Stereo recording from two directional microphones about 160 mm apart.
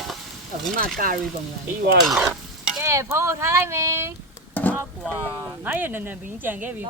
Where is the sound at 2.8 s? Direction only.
15° right (ahead or behind).